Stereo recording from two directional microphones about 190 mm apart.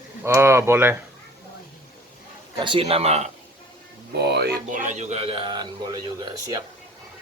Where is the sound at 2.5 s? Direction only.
25° right (ahead or behind).